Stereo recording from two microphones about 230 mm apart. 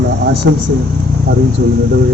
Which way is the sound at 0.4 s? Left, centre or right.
Right.